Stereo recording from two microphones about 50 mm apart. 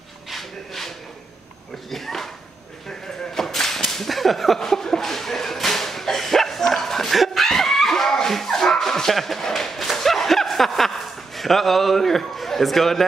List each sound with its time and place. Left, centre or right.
0.3 s a sound: centre
1.9 s speech: centre
3.3 s whip: centre